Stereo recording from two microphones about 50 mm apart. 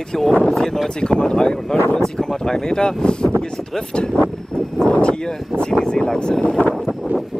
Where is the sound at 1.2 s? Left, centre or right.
Centre.